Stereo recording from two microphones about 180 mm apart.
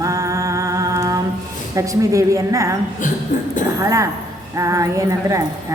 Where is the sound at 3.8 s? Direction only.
15° right (ahead or behind).